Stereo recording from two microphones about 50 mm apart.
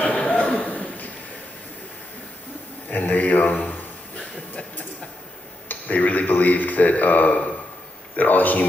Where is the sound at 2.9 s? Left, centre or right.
Left.